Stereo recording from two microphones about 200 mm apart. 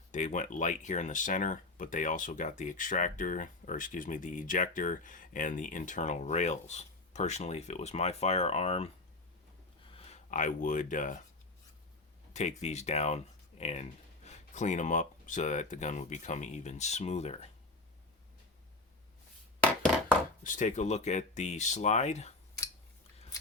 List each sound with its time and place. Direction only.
0.1 s speech: 35° left (ahead or behind)
9.9 s speech: 30° left (ahead or behind)
12.3 s speech: 35° left (ahead or behind)
20.4 s speech: 40° left (ahead or behind)